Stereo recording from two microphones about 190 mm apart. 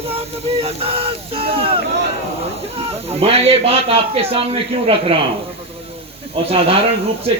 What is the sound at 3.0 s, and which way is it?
A man's voice, 30° right (ahead or behind).